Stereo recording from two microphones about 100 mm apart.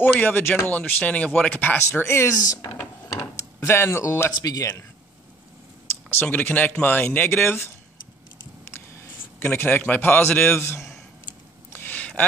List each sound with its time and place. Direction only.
0.0 s speech: 15° left (ahead or behind); by 2.7 s 35° left (ahead or behind)
2.8 s drawer open or close: 30° left (ahead or behind)
4.3 s speech: 35° left (ahead or behind)
6.0 s speech: 20° left (ahead or behind)
9.4 s speech: 20° left (ahead or behind)
11.7 s a sound: 20° left (ahead or behind)